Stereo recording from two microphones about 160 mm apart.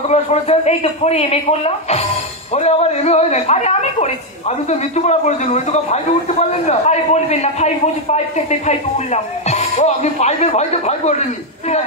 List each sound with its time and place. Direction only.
0.1 s a man's voice: 40° left (ahead or behind)